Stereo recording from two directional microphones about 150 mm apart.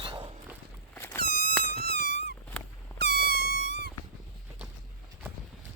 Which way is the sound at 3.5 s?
90° right.